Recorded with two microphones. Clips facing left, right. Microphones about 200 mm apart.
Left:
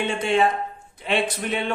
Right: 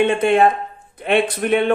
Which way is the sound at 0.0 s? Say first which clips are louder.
Right 7 dB; 55° right (ahead or behind).